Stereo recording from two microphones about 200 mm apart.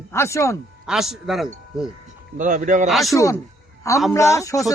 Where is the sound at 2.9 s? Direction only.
Centre (ahead or behind).